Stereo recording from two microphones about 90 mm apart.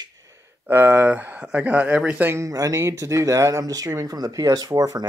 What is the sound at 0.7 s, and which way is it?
Speech, 25° right (ahead or behind).